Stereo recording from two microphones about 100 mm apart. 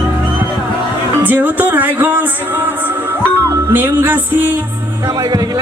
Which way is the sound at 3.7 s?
20° right (ahead or behind).